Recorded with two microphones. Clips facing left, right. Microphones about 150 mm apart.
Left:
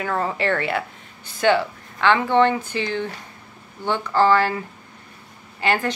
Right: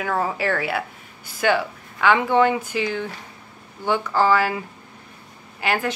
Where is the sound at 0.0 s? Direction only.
5° right (ahead or behind).